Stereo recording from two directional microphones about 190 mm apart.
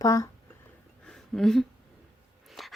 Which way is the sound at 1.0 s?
5° left (ahead or behind).